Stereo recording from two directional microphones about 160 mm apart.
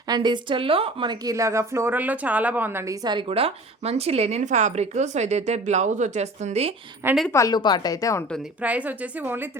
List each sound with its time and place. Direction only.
0.1 s a woman's voice: 30° right (ahead or behind)
7.3 s a woman's voice: 20° left (ahead or behind)
8.6 s a woman's voice: 10° right (ahead or behind)